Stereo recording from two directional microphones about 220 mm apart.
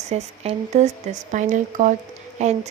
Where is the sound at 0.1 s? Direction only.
30° right (ahead or behind).